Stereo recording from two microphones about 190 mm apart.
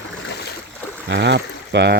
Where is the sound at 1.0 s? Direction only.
70° right (ahead or behind).